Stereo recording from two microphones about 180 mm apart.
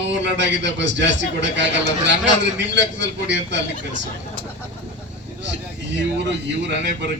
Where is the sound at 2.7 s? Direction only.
75° right (ahead or behind).